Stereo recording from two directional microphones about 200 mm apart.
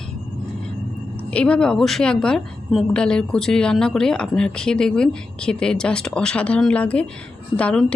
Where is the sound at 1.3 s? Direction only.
5° left (ahead or behind).